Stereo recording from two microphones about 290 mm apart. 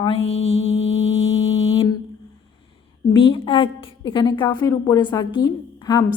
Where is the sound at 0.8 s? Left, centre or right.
Left.